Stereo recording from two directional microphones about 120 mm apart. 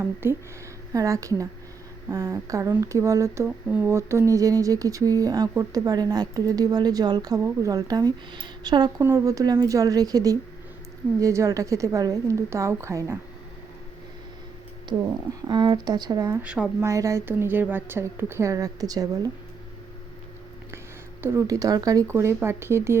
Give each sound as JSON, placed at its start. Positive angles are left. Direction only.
{"t": 0.0, "sound": "speech", "side_deg": -20}
{"t": 15.4, "sound": "speech", "side_deg": -35}
{"t": 16.4, "sound": "speech", "side_deg": -10}
{"t": 16.8, "sound": "speech", "side_deg": -25}
{"t": 21.2, "sound": "speech", "side_deg": -20}